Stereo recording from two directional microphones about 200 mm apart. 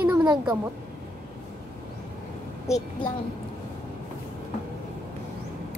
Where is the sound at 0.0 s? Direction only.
5° right (ahead or behind).